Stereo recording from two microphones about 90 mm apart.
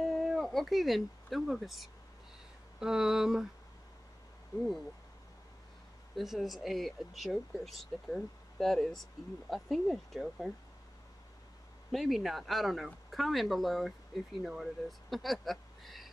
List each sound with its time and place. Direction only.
0.0 s cat: centre (ahead or behind)
2.8 s a sound: 5° right (ahead or behind)
4.6 s speech: centre (ahead or behind)
6.1 s speech: centre (ahead or behind)
11.9 s speech: centre (ahead or behind)